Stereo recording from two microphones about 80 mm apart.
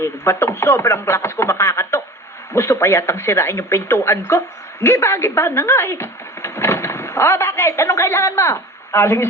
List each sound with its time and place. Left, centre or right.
0.0 s speech: left